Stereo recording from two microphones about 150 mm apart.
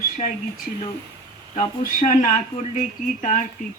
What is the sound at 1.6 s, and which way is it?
A man's voice, 60° left (ahead or behind).